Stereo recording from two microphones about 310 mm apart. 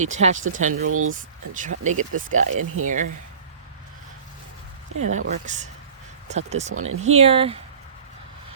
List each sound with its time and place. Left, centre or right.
0.0 s speech: right
0.6 s speech: right
1.1 s speech: right
4.9 s speech: right
6.7 s speech: right
7.0 s speech: centre